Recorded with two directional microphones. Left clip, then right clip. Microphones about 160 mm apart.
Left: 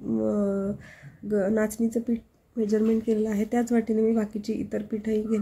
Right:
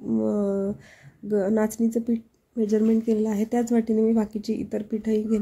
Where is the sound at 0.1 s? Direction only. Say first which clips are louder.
Right 1 dB; 10° right (ahead or behind).